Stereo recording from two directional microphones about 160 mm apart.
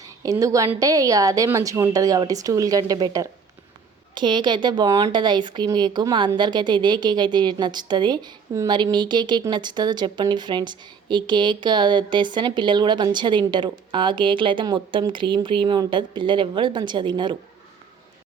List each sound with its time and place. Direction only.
0.0 s speech: 20° right (ahead or behind)